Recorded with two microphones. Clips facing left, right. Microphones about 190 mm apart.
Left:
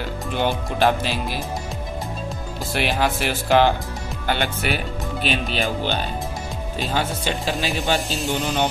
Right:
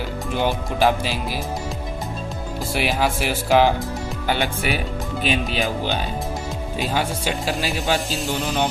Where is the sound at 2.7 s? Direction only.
5° right (ahead or behind).